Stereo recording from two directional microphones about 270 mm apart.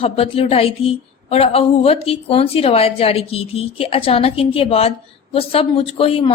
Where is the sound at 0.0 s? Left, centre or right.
Left.